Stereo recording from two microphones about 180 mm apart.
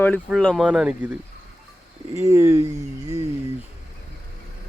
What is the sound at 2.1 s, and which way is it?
Speech, 15° right (ahead or behind).